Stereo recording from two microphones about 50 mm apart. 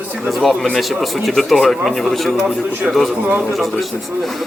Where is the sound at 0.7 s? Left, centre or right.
Centre.